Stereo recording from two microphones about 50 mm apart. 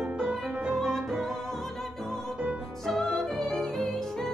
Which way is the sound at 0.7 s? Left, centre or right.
Centre.